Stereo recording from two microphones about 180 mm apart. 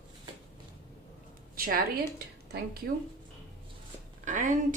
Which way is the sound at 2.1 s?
65° right (ahead or behind).